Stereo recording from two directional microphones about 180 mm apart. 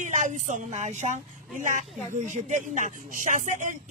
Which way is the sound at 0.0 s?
45° right (ahead or behind).